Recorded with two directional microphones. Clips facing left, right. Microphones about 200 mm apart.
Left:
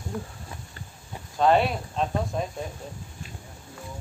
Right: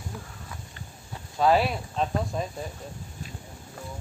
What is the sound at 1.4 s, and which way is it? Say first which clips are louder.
Speech: left 1 dB; 5° right (ahead or behind).